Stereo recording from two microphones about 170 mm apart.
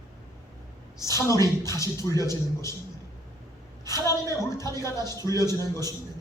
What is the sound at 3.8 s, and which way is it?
Speech, 20° left (ahead or behind).